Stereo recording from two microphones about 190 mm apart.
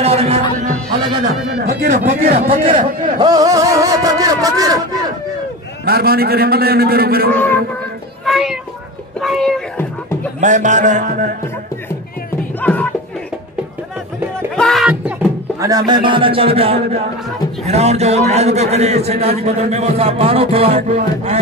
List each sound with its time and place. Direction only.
0.0 s music: 30° right (ahead or behind)
1.5 s a man's voice: 55° right (ahead or behind)
3.2 s a sound: 20° right (ahead or behind)
5.9 s a man's voice: 55° right (ahead or behind)
7.3 s speech: 10° left (ahead or behind)
8.3 s cat: centre (ahead or behind)
9.2 s meow: centre (ahead or behind)
10.4 s a man's voice: 40° right (ahead or behind)
12.5 s music: 10° left (ahead or behind)
14.5 s music: centre (ahead or behind)
15.6 s a man's voice: 20° right (ahead or behind)